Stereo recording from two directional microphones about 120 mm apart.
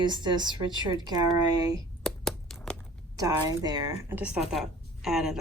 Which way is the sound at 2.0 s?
5° left (ahead or behind).